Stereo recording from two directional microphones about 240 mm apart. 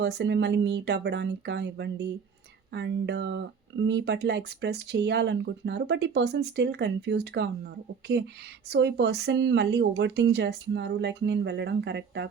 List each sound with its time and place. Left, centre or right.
0.0 s speech: right